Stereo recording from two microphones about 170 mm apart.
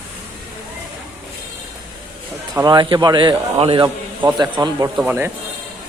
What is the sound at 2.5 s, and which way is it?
A man's voice, 25° right (ahead or behind).